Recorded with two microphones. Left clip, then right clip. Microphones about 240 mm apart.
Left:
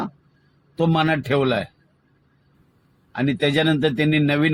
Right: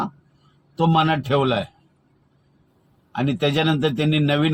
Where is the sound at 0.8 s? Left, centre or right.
Right.